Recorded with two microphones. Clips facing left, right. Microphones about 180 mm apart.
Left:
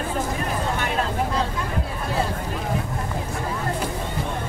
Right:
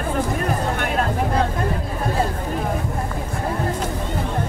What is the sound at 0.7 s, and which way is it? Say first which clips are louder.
Vehicle: right 3 dB; 55° right (ahead or behind).